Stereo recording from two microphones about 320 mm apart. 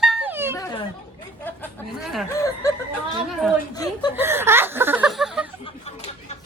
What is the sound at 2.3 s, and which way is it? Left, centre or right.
Speech, centre.